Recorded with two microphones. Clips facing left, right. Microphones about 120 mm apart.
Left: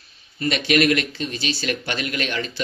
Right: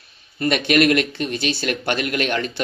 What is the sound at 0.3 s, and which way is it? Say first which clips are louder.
Speech: right 2 dB; 50° right (ahead or behind).